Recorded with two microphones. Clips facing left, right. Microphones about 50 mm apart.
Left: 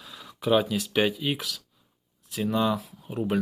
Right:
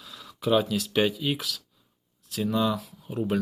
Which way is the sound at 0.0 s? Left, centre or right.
Centre.